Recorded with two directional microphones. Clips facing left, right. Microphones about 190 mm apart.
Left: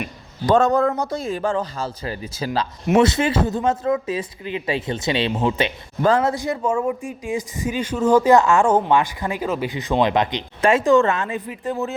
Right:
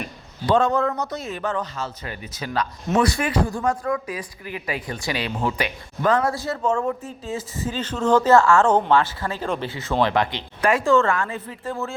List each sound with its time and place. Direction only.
0.4 s a man's voice: 45° left (ahead or behind); by 11.9 s 20° left (ahead or behind)